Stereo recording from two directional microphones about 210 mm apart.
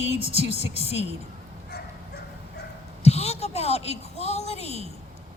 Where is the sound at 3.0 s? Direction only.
30° left (ahead or behind).